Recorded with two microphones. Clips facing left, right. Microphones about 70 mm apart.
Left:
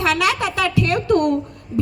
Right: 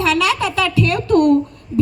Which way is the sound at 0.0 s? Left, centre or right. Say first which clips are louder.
Right 2 dB; left.